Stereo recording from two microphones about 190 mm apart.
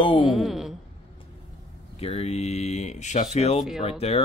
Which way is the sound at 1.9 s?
30° left (ahead or behind).